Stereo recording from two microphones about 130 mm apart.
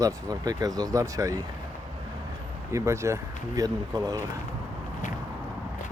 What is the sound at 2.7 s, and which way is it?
Speech, 20° right (ahead or behind).